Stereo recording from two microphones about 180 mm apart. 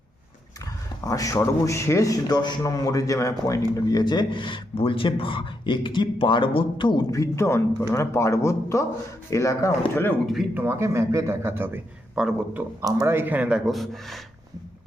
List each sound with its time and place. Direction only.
0.6 s speech: 20° left (ahead or behind)
10.5 s a man's voice: 10° right (ahead or behind)
12.8 s a man's voice: 15° right (ahead or behind); by 14.2 s centre (ahead or behind)